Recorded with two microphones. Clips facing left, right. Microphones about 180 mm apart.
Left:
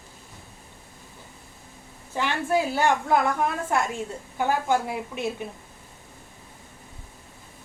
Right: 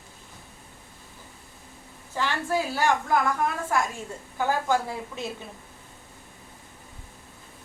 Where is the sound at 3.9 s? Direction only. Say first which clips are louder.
Left 5 dB; 20° left (ahead or behind).